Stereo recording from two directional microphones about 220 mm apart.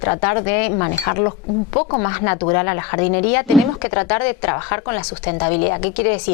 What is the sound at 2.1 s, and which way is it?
Speech, 15° left (ahead or behind).